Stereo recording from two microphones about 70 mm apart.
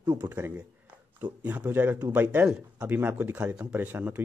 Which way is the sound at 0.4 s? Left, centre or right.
Right.